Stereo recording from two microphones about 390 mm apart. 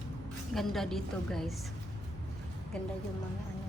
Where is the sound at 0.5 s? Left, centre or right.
Centre.